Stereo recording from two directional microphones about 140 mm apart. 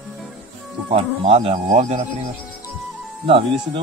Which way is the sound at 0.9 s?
45° right (ahead or behind).